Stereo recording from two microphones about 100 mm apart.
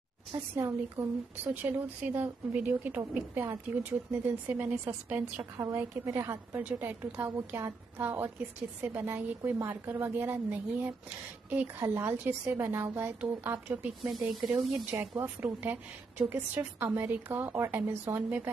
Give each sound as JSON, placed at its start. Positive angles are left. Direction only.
{"t": 0.3, "sound": "a woman's voice", "side_deg": -30}
{"t": 5.6, "sound": "a woman's voice", "side_deg": -30}